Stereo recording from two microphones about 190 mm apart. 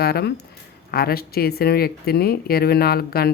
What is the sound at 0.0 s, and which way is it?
Speech, 55° left (ahead or behind).